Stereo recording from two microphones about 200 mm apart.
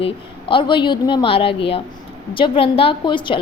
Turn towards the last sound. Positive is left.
turn(degrees=25)  # may be behind; listen again after turning